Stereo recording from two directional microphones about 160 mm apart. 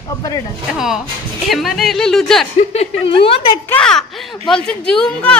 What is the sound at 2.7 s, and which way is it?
Speech, 35° left (ahead or behind).